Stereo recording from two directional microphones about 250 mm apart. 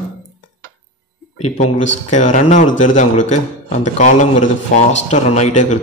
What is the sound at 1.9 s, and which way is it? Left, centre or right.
A man's voice, left.